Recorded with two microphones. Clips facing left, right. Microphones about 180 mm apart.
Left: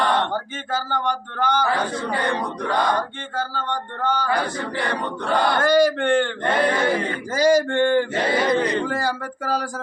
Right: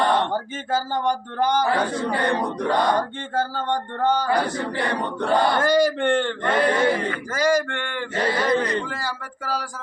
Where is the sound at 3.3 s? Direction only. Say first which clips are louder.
Right 4 dB; 50° right (ahead or behind).